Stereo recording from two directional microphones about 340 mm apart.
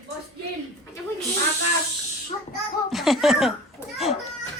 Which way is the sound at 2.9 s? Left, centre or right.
Centre.